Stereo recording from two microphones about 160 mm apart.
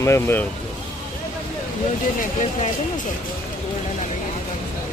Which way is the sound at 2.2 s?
50° left (ahead or behind).